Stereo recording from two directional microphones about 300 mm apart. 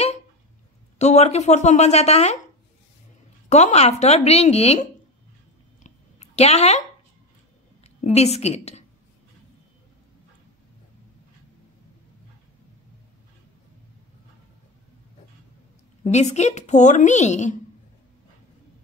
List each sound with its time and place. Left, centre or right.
0.9 s a woman's voice: left
3.4 s a woman's voice: left
5.9 s a sound: left
7.8 s a woman's voice: left
16.0 s a woman's voice: left